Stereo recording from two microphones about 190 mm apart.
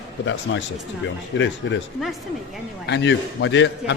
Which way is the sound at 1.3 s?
75° left (ahead or behind).